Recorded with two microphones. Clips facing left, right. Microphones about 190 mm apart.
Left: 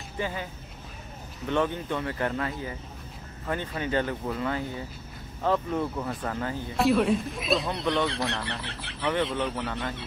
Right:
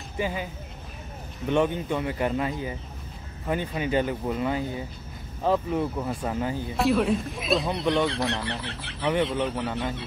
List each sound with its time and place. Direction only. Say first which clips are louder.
0.2 s speech: right 3 dB; 15° right (ahead or behind)
1.5 s speech: right 3 dB; 15° right (ahead or behind)
6.8 s speech: even; centre (ahead or behind)